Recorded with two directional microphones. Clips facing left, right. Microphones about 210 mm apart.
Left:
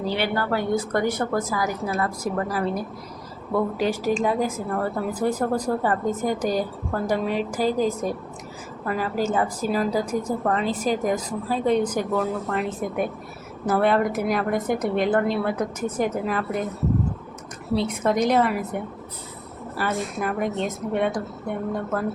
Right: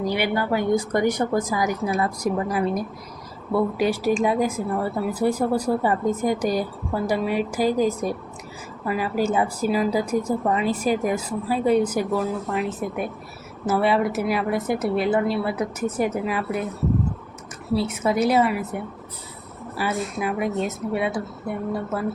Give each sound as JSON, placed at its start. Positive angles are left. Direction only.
{"t": 0.0, "sound": "a woman's voice", "side_deg": -15}
{"t": 17.7, "sound": "a woman's voice", "side_deg": -5}